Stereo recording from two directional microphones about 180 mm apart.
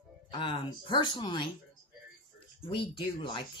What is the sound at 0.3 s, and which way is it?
Speech, 30° left (ahead or behind).